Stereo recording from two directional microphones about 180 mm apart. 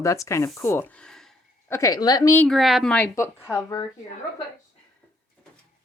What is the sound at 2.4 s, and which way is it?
Speech, centre (ahead or behind).